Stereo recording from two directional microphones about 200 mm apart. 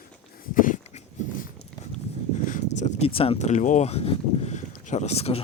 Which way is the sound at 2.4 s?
40° left (ahead or behind).